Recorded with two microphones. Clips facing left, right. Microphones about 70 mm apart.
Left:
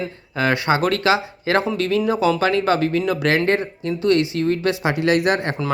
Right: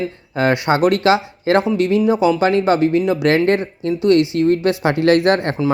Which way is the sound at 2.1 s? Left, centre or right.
Centre.